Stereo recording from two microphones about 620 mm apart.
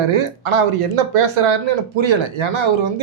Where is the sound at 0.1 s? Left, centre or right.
Right.